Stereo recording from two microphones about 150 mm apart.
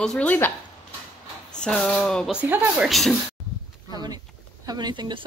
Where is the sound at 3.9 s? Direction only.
25° right (ahead or behind).